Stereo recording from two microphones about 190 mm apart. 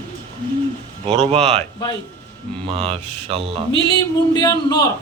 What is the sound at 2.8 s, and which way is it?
Speech, 30° right (ahead or behind).